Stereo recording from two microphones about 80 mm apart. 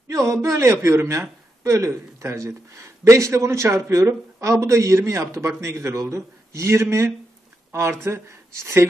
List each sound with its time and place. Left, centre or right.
0.1 s a man's voice: right